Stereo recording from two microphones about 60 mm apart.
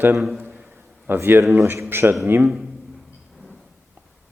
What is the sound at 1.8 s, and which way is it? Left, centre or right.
Speech, right.